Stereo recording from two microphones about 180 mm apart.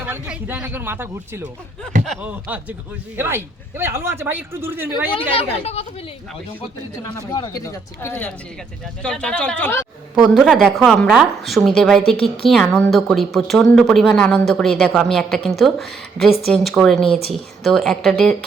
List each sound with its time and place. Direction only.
0.0 s a man's voice: 10° right (ahead or behind)
5.3 s speech: 30° left (ahead or behind)
7.3 s speech: 20° left (ahead or behind)
10.2 s a woman's voice: 5° right (ahead or behind)